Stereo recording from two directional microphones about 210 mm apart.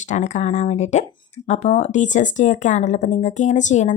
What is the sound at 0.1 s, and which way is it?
Speech, 35° left (ahead or behind).